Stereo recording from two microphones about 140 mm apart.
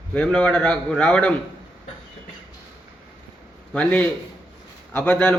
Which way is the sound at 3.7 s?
10° left (ahead or behind).